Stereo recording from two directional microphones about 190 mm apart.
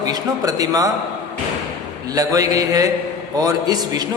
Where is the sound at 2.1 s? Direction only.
20° right (ahead or behind).